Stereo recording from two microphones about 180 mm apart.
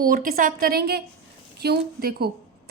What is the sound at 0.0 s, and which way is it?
A woman's voice, 50° right (ahead or behind).